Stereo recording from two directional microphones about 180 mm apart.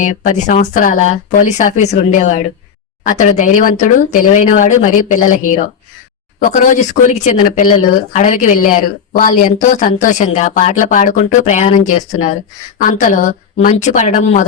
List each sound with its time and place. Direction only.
0.0 s speech: 45° left (ahead or behind)